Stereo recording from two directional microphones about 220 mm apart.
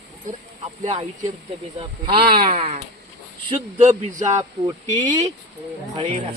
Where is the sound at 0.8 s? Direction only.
30° right (ahead or behind).